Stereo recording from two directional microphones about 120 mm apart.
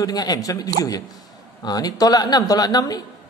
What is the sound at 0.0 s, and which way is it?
A man's voice, 30° left (ahead or behind).